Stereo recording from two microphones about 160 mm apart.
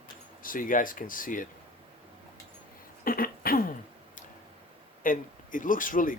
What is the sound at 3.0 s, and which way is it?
Cough, 65° left (ahead or behind).